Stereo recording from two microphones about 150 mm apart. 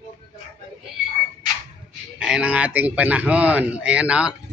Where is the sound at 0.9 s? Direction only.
5° right (ahead or behind).